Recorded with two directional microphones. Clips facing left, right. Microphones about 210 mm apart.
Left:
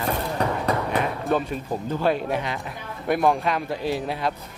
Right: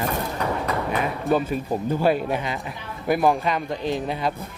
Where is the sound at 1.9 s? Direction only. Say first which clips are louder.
Right 2 dB; 10° right (ahead or behind).